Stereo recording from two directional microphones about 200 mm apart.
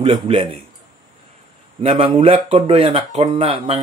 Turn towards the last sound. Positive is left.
turn(degrees=-30)  # may be behind; listen again after turning